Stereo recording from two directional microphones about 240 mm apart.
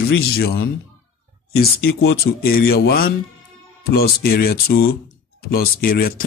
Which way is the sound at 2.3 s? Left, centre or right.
Left.